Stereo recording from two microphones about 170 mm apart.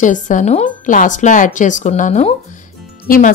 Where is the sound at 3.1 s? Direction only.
55° left (ahead or behind).